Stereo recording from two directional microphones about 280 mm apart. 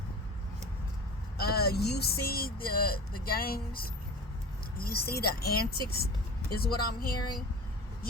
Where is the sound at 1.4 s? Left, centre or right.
Left.